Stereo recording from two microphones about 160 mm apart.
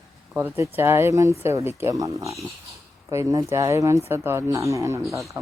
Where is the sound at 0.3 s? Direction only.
15° right (ahead or behind).